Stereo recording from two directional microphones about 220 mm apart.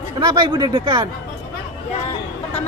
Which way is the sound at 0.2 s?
20° right (ahead or behind).